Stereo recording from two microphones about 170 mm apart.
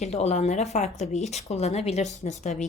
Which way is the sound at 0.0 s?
40° left (ahead or behind).